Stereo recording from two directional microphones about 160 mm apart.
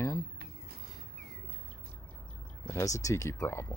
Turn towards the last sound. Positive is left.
turn(degrees=15)  # may be behind; listen again after turning